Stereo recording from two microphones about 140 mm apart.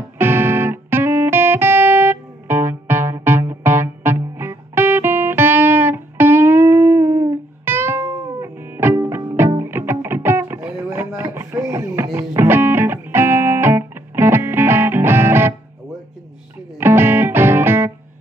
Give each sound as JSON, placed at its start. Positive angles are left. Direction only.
{"t": 0.2, "sound": "music", "side_deg": -15}
{"t": 16.7, "sound": "music", "side_deg": -15}